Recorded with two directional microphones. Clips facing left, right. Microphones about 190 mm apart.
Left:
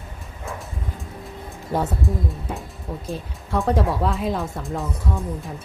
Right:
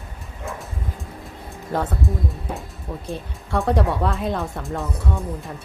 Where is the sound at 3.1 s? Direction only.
Centre (ahead or behind).